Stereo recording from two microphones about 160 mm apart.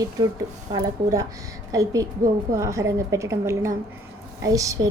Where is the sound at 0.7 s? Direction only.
20° right (ahead or behind).